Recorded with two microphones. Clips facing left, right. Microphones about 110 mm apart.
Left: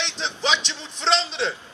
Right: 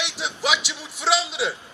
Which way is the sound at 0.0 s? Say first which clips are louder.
Even; 10° right (ahead or behind).